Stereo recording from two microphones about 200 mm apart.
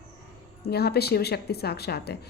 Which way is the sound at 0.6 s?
50° left (ahead or behind).